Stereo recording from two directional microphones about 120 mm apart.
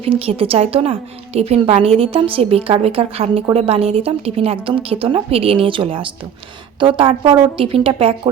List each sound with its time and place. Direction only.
0.0 s a woman's voice: 50° right (ahead or behind)